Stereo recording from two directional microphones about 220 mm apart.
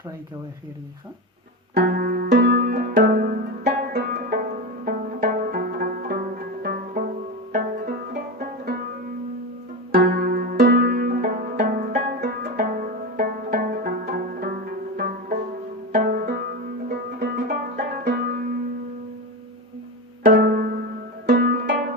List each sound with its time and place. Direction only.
1.7 s music: 40° right (ahead or behind)
9.9 s music: 45° right (ahead or behind)
20.2 s pizzicato: 40° right (ahead or behind)
21.2 s music: 40° right (ahead or behind)